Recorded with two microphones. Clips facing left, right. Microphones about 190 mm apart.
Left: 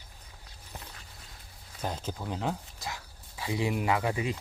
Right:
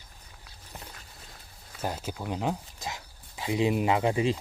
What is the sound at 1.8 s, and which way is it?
Speech, 10° right (ahead or behind).